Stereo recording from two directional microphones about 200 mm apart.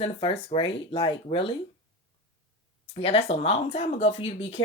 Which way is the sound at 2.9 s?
30° left (ahead or behind).